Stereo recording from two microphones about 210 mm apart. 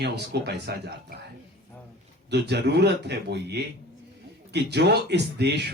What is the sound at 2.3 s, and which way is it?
Speech, 55° right (ahead or behind).